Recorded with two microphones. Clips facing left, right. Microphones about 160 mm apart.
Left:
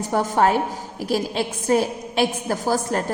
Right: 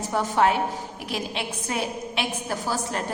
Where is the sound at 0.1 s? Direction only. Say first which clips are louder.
Left 3 dB; 45° left (ahead or behind).